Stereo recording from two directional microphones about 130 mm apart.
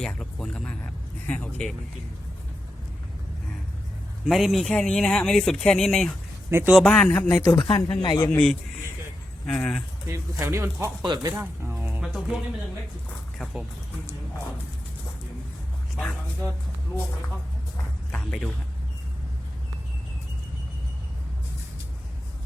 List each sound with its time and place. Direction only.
0.0 s speech: 5° left (ahead or behind)
4.3 s speech: centre (ahead or behind)
6.5 s a man's voice: 15° right (ahead or behind)
6.7 s speech: 5° left (ahead or behind)
7.4 s speech: 25° left (ahead or behind)
9.5 s speech: 5° left (ahead or behind)
10.1 s speech: 20° right (ahead or behind)
11.0 s speech: 30° right (ahead or behind)
11.9 s music: 5° right (ahead or behind)
13.4 s speech: 5° right (ahead or behind)
16.0 s speech: 10° left (ahead or behind)
18.1 s speech: 5° left (ahead or behind)